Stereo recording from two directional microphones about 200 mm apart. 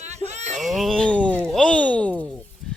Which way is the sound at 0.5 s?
Centre (ahead or behind).